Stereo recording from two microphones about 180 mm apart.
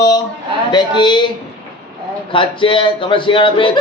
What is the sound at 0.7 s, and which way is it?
Speech, 25° left (ahead or behind).